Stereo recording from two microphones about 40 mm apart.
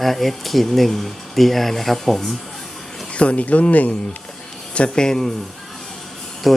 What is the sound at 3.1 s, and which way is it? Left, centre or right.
Speech, left.